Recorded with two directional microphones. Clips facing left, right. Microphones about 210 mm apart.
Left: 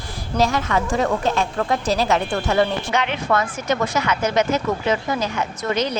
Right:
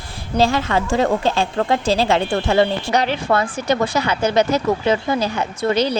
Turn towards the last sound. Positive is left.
turn(degrees=-30)  # may be behind; listen again after turning